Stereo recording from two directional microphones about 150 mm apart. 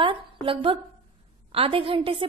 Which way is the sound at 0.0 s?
35° right (ahead or behind).